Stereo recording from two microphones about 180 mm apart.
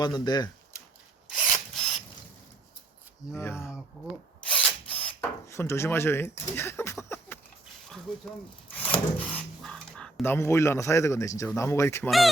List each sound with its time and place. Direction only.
0.0 s speech: 25° left (ahead or behind)
1.3 s rub: centre (ahead or behind)
3.3 s speech: 15° left (ahead or behind)
4.5 s drill: 5° left (ahead or behind)
5.0 s speech: 15° left (ahead or behind)
8.1 s speech: centre (ahead or behind)